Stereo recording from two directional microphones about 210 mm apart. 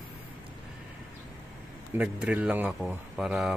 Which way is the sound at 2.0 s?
5° right (ahead or behind).